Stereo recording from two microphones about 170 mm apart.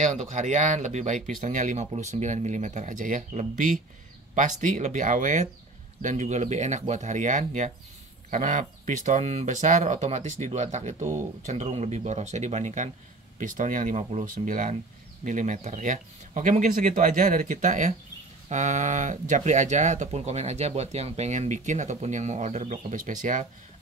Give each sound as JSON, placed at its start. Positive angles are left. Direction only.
{"t": 0.0, "sound": "speech", "side_deg": -45}